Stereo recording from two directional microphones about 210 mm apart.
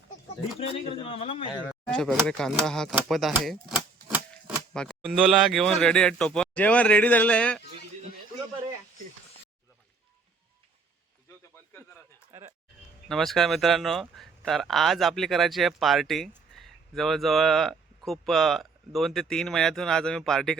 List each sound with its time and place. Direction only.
0.6 s a man's voice: 25° left (ahead or behind)
1.5 s speech: 5° right (ahead or behind)
13.1 s speech: centre (ahead or behind)